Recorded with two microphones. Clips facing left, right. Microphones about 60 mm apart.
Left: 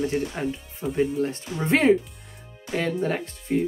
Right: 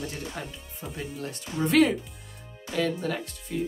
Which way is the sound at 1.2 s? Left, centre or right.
Left.